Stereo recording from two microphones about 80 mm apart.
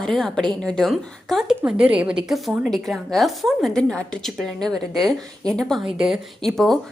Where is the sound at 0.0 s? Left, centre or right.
Centre.